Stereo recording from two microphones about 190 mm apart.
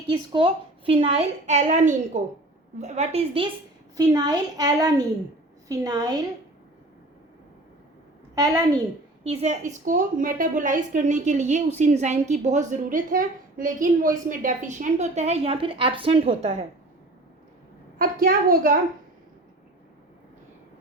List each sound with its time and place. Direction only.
0.1 s a woman's voice: 25° right (ahead or behind)
3.9 s a woman's voice: 20° right (ahead or behind)
9.2 s a woman's voice: 35° right (ahead or behind)
17.9 s a woman's voice: 50° right (ahead or behind)